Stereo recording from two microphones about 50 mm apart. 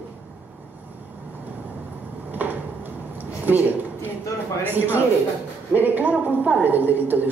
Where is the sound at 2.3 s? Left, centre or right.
Right.